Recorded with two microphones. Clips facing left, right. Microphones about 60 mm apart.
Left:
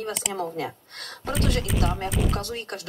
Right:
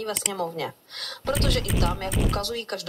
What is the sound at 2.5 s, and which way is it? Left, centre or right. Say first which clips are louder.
Speech: right 2 dB; left.